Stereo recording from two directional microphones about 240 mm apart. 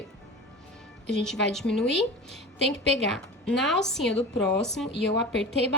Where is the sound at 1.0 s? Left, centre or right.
Centre.